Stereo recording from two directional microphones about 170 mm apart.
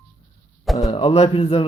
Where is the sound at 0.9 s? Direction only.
30° left (ahead or behind).